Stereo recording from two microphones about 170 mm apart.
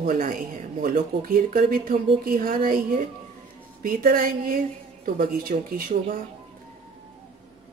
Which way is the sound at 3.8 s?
55° right (ahead or behind).